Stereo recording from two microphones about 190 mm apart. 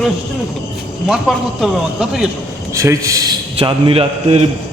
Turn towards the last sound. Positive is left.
turn(degrees=-30)  # may be behind; listen again after turning